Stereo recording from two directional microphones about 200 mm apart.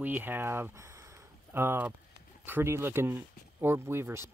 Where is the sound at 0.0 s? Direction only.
10° right (ahead or behind).